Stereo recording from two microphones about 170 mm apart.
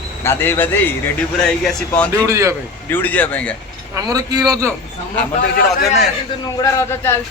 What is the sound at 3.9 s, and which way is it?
Speech, 20° right (ahead or behind).